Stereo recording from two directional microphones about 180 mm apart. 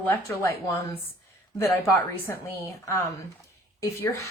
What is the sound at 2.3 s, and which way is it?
Speech, 15° left (ahead or behind).